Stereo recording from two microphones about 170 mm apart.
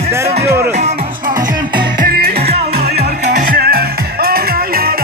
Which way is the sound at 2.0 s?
60° right (ahead or behind).